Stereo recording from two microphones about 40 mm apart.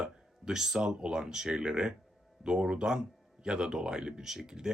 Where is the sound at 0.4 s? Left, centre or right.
Centre.